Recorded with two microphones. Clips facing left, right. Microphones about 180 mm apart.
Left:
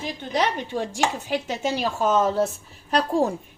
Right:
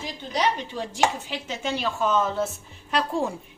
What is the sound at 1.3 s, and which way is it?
A woman's voice, 40° left (ahead or behind).